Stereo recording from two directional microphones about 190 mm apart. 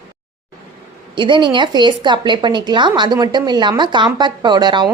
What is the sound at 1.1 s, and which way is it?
A woman's voice, 25° right (ahead or behind).